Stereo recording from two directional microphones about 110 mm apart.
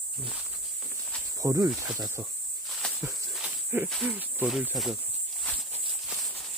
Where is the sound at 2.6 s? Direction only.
Centre (ahead or behind).